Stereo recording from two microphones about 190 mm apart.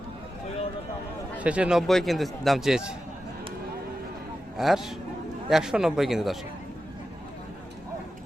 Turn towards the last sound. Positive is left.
turn(degrees=0)  # may be behind; listen again after turning